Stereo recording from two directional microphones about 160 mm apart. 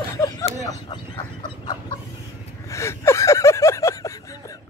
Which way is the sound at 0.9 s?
30° left (ahead or behind).